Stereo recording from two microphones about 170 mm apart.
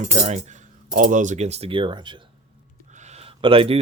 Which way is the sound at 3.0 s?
35° right (ahead or behind).